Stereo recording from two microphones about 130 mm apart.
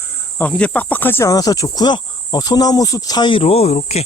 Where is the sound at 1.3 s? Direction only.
30° left (ahead or behind).